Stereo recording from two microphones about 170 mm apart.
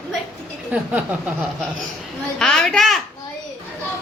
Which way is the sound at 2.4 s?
5° left (ahead or behind).